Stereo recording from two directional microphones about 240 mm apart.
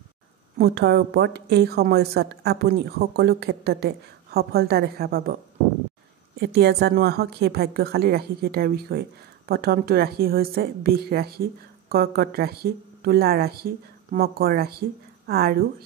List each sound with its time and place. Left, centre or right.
0.6 s a woman's voice: right
6.4 s a woman's voice: right